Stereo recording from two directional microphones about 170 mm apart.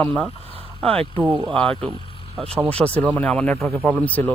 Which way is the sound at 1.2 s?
30° right (ahead or behind).